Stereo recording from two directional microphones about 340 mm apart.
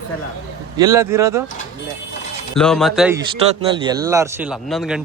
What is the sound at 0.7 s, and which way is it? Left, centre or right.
Speech, centre.